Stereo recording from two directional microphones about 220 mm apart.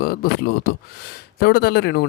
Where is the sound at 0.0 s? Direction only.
45° left (ahead or behind).